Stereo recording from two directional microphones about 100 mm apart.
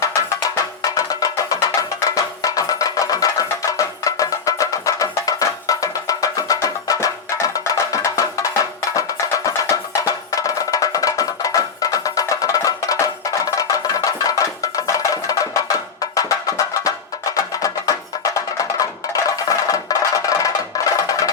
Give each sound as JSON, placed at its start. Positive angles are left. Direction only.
{"t": 0.0, "sound": "music", "side_deg": 35}
{"t": 17.3, "sound": "music", "side_deg": 35}